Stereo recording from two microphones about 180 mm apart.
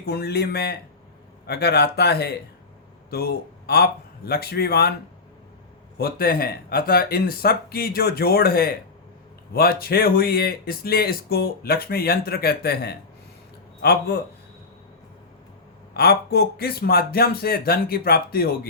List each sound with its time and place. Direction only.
0.0 s a man's voice: 60° left (ahead or behind)
6.0 s speech: 55° left (ahead or behind)
16.0 s speech: 60° left (ahead or behind)